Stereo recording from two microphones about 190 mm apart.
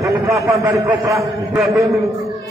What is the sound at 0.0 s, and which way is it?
A man's voice, 15° right (ahead or behind).